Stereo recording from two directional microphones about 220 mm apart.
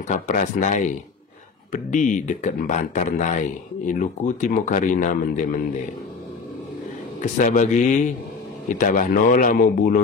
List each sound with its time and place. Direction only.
0.1 s speech: 35° left (ahead or behind)
7.2 s speech: 35° left (ahead or behind)